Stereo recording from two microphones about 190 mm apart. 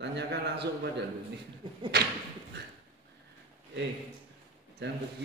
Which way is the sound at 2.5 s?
60° right (ahead or behind).